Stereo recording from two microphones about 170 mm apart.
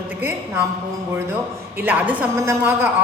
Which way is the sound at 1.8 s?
10° right (ahead or behind).